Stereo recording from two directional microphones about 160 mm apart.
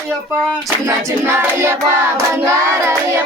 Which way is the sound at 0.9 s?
15° right (ahead or behind).